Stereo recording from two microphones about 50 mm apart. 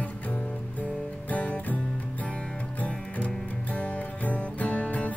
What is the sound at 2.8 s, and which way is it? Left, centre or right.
Music, left.